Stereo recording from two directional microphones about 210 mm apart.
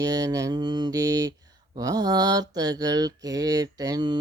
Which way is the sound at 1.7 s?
20° right (ahead or behind).